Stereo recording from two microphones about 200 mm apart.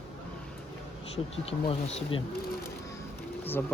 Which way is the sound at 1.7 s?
30° left (ahead or behind).